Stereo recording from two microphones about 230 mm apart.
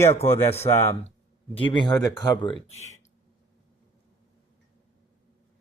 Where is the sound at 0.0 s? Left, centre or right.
Left.